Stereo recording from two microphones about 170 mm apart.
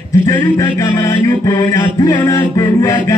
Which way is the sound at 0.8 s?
20° left (ahead or behind).